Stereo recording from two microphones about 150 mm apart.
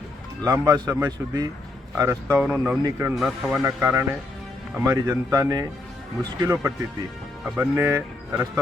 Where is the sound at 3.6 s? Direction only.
15° right (ahead or behind).